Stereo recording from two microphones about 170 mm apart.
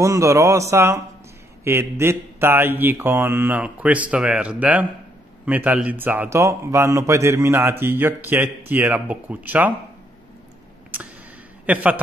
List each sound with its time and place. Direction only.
0.0 s a man's voice: 20° right (ahead or behind)
10.9 s a sound: 10° right (ahead or behind)
11.6 s a man's voice: 10° right (ahead or behind)